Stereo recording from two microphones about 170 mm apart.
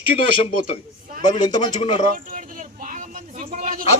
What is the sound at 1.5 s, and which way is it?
Speech, 25° left (ahead or behind).